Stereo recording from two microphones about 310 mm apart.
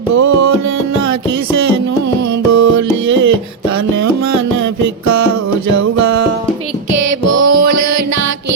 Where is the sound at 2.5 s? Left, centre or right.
Right.